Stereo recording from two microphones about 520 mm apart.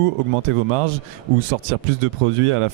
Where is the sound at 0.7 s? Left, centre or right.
Right.